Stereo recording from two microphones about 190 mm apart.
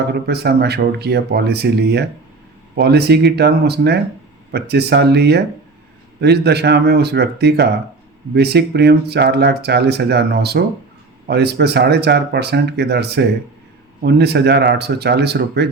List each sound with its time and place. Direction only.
0.1 s speech: 60° right (ahead or behind)